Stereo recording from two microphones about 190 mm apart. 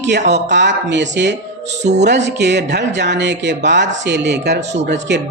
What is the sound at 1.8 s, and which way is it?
Music, 35° right (ahead or behind).